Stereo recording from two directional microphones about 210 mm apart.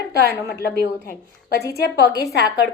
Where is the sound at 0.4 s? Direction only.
50° left (ahead or behind).